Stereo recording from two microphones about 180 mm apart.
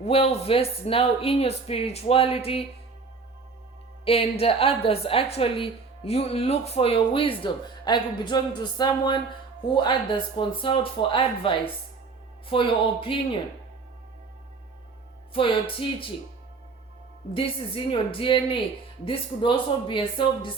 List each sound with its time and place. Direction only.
0.0 s a woman's voice: 35° left (ahead or behind)
4.0 s a woman's voice: 30° left (ahead or behind)
15.3 s speech: 30° left (ahead or behind)
17.9 s speech: 30° left (ahead or behind)